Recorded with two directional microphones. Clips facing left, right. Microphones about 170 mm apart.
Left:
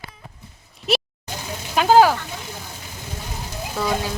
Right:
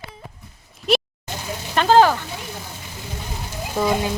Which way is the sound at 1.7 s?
10° left (ahead or behind).